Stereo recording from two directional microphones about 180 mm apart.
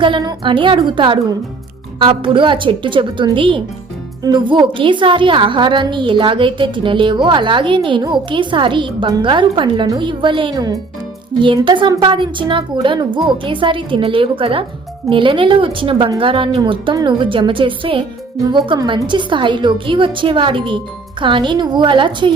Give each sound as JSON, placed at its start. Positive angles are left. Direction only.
{"t": 0.0, "sound": "a woman's voice", "side_deg": -25}